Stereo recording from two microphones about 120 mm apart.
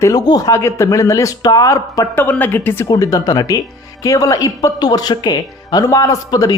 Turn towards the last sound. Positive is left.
turn(degrees=30)  # may be behind; listen again after turning